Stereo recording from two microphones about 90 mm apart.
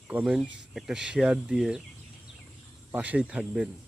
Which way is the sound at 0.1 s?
15° right (ahead or behind).